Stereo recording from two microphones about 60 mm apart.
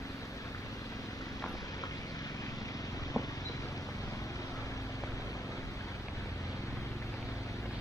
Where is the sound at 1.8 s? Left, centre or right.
Left.